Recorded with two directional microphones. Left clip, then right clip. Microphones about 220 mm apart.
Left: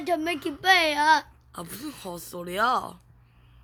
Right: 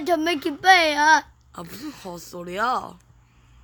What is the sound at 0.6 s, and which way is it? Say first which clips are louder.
Speech: right 4 dB; 25° right (ahead or behind).